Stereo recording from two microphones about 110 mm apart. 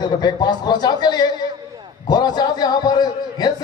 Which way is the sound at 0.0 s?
40° left (ahead or behind).